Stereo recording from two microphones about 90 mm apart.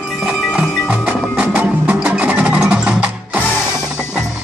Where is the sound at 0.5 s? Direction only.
10° right (ahead or behind).